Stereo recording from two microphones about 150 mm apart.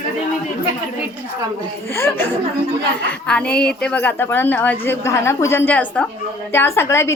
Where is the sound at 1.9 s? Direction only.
15° left (ahead or behind).